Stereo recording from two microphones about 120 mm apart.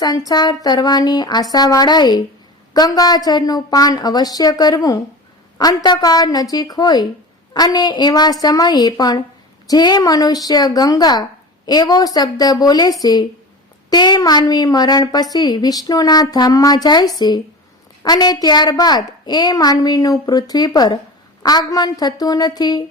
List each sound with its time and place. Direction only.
0.0 s a woman's voice: 30° left (ahead or behind)